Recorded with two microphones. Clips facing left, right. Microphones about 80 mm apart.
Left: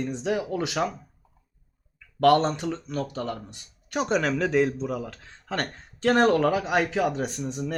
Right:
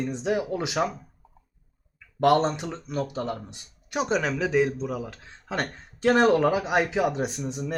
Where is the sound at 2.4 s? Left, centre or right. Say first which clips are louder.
Even; centre.